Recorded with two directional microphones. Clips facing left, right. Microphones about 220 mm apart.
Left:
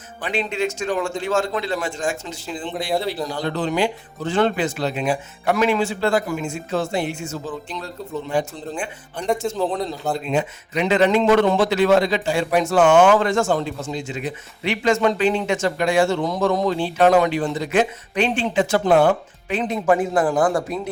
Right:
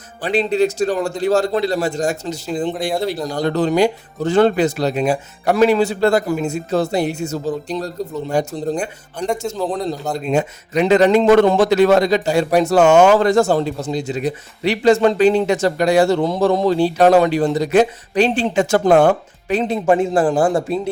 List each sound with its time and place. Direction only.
0.2 s speech: 35° right (ahead or behind)
9.1 s a man's voice: centre (ahead or behind)
10.2 s speech: 40° right (ahead or behind)
18.5 s speech: 45° right (ahead or behind); by 20.9 s 25° right (ahead or behind)